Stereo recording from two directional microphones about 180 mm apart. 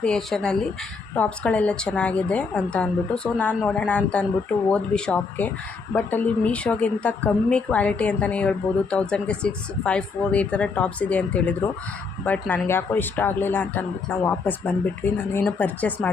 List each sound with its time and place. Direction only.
0.0 s speech: 5° left (ahead or behind)